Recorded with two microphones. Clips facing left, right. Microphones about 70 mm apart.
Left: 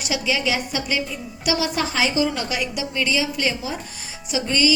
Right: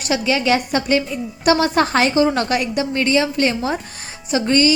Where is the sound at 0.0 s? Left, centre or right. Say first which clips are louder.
Right 5 dB; right.